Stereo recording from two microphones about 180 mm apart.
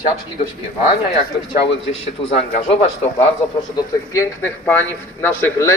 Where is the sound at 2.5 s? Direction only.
35° left (ahead or behind).